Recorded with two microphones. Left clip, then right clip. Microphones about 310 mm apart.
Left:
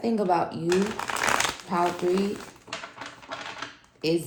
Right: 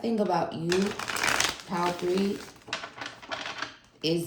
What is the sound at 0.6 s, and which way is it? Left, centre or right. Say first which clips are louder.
Shuffling cards: left 3 dB; centre.